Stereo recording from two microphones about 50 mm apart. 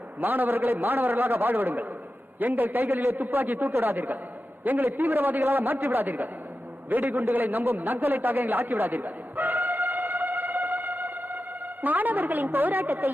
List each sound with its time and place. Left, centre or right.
0.2 s a man's voice: right
4.9 s a man's voice: right
10.2 s music: right
10.7 s music: right
11.8 s a man's voice: right